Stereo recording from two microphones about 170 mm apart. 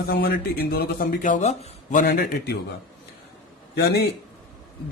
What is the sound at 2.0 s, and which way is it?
Speech, 65° left (ahead or behind).